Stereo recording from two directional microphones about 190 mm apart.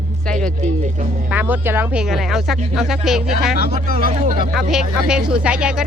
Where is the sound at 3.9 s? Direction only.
45° right (ahead or behind).